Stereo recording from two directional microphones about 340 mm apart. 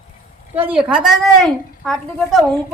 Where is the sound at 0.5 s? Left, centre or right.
Centre.